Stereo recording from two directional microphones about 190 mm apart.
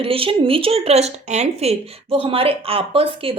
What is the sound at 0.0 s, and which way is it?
Speech, 30° right (ahead or behind).